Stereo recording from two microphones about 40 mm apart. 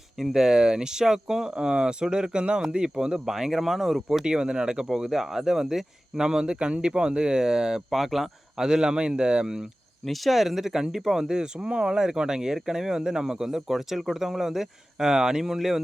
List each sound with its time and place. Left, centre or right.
0.2 s speech: centre
3.3 s speech: centre
4.3 s speech: centre
7.9 s speech: centre
8.6 s speech: centre
10.1 s speech: centre